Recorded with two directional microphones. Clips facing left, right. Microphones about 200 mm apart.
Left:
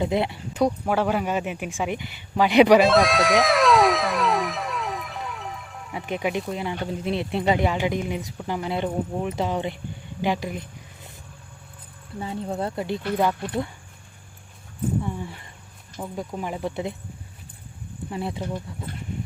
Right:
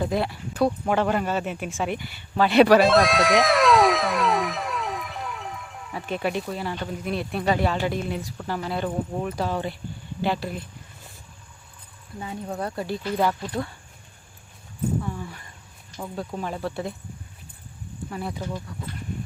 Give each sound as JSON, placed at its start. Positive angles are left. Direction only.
{"t": 0.0, "sound": "speech", "side_deg": 20}
{"t": 0.9, "sound": "a man's voice", "side_deg": 10}
{"t": 2.8, "sound": "a sound", "side_deg": 0}
{"t": 5.9, "sound": "a man's voice", "side_deg": 15}
{"t": 10.2, "sound": "a sound", "side_deg": 15}
{"t": 12.2, "sound": "speech", "side_deg": 30}
{"t": 15.0, "sound": "a man's voice", "side_deg": 25}
{"t": 18.1, "sound": "speech", "side_deg": 25}